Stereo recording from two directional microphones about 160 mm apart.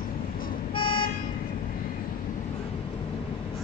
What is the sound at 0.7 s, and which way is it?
Vehicle, 30° left (ahead or behind).